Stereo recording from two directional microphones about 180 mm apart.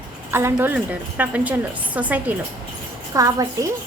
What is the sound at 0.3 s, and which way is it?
A woman's voice, 10° right (ahead or behind).